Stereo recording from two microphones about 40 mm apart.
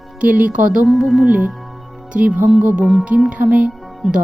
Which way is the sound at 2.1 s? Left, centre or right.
Right.